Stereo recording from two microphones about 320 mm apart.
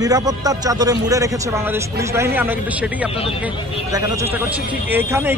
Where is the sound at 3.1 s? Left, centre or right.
Centre.